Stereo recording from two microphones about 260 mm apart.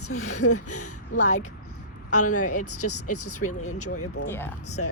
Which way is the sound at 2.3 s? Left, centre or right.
Left.